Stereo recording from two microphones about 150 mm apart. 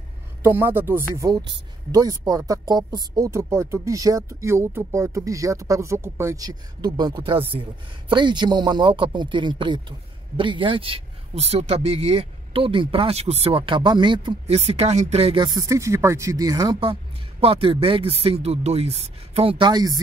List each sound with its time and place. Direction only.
0.4 s speech: 15° right (ahead or behind); by 14.6 s 35° right (ahead or behind)
14.6 s speech: 45° right (ahead or behind); by 20.0 s 25° right (ahead or behind)